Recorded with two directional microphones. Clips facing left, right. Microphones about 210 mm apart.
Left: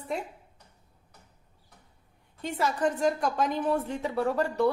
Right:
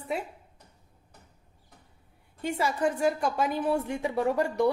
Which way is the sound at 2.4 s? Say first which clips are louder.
Even; 10° right (ahead or behind).